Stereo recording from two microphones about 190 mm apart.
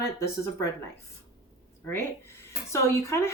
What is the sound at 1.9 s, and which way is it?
Speech, 10° left (ahead or behind).